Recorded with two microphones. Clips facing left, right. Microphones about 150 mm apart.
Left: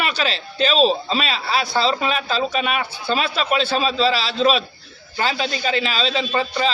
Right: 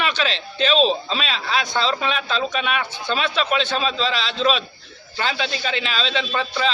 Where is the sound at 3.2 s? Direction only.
40° left (ahead or behind).